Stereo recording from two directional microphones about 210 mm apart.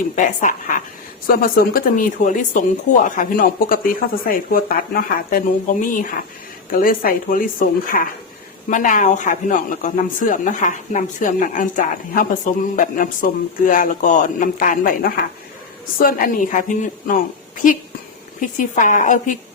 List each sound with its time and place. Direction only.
0.2 s speech: 40° left (ahead or behind)
18.3 s speech: 40° left (ahead or behind)